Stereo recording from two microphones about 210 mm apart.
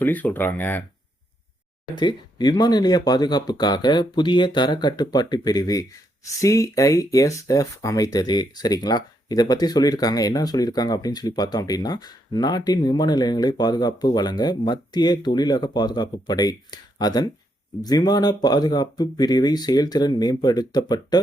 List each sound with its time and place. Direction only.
0.0 s speech: 10° left (ahead or behind)
2.0 s speech: 20° left (ahead or behind)